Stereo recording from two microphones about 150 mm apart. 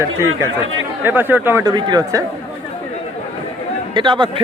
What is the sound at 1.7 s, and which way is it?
Speech, 30° right (ahead or behind).